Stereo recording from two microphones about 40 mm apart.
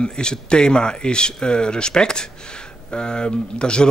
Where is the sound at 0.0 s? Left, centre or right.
Left.